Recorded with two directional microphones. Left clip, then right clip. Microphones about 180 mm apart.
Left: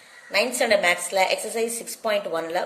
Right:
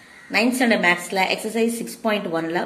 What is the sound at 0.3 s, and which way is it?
A woman's voice, 20° left (ahead or behind).